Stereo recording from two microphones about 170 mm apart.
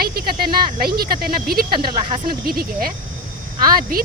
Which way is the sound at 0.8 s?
65° right (ahead or behind).